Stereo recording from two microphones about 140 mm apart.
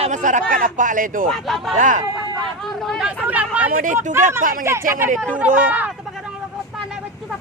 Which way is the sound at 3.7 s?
85° right.